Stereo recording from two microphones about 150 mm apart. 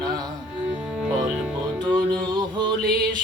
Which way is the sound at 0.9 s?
5° right (ahead or behind).